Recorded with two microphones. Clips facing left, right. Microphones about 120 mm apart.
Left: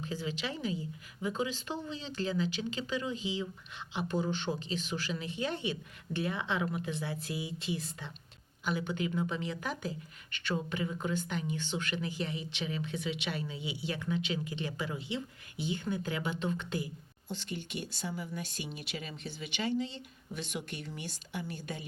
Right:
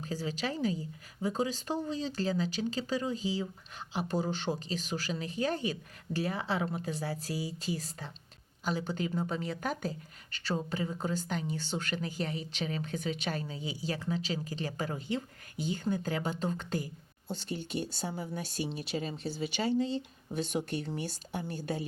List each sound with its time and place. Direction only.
0.0 s speech: 40° right (ahead or behind)
10.3 s speech: 35° right (ahead or behind)